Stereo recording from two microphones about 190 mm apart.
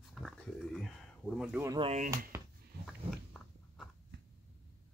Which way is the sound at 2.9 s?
Centre (ahead or behind).